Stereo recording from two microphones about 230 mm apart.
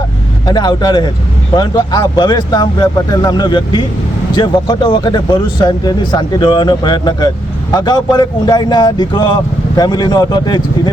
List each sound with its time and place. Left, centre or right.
0.4 s a man's voice: centre